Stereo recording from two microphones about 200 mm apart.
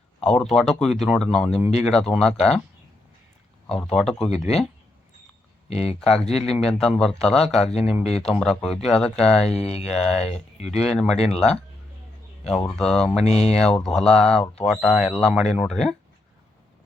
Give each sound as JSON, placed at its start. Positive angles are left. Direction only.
{"t": 0.2, "sound": "speech", "side_deg": 0}
{"t": 3.9, "sound": "speech", "side_deg": 0}
{"t": 5.6, "sound": "speech", "side_deg": 30}
{"t": 6.0, "sound": "speech", "side_deg": 5}
{"t": 6.3, "sound": "speech", "side_deg": 30}
{"t": 6.7, "sound": "speech", "side_deg": 0}
{"t": 7.6, "sound": "speech", "side_deg": 30}
{"t": 8.2, "sound": "speech", "side_deg": 0}
{"t": 9.5, "sound": "speech", "side_deg": 30}
{"t": 9.9, "sound": "speech", "side_deg": 0}
{"t": 10.2, "sound": "speech", "side_deg": 30}
{"t": 10.8, "sound": "speech", "side_deg": 0}
{"t": 13.2, "sound": "speech", "side_deg": 30}
{"t": 13.6, "sound": "speech", "side_deg": 5}